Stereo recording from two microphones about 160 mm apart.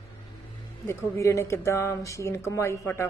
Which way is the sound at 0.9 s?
15° left (ahead or behind).